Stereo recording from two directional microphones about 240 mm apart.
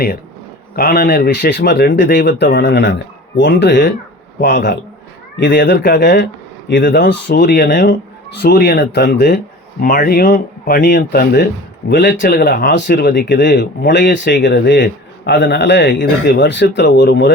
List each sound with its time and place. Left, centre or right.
0.8 s speech: left